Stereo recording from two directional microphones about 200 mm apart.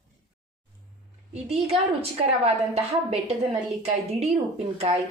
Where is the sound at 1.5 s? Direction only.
30° right (ahead or behind).